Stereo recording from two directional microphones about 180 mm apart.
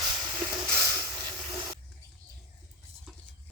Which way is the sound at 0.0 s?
25° right (ahead or behind).